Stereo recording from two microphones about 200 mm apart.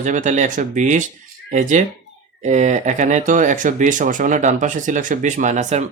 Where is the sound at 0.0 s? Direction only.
40° right (ahead or behind).